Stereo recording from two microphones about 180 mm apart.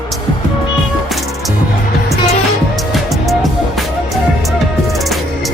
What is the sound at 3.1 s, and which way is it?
Music, centre (ahead or behind).